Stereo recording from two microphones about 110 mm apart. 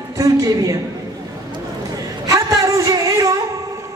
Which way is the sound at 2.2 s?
30° right (ahead or behind).